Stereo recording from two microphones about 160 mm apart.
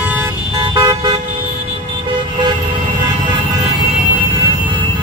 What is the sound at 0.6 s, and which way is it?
Car, 25° right (ahead or behind).